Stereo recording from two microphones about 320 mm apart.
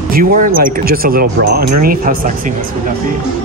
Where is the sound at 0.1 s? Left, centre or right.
Right.